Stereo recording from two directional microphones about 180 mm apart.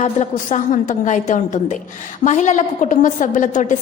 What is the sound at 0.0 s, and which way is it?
A woman's voice, 40° left (ahead or behind).